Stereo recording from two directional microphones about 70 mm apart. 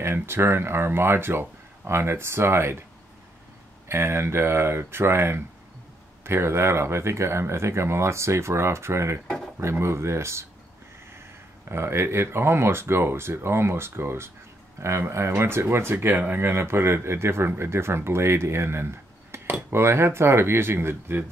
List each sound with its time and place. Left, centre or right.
0.0 s speech: right
3.9 s speech: right
11.7 s speech: right